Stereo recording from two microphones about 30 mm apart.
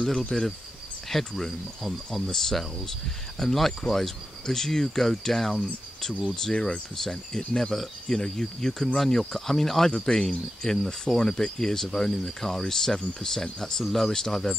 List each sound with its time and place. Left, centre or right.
0.3 s speech: centre
13.8 s speech: centre
14.1 s speech: centre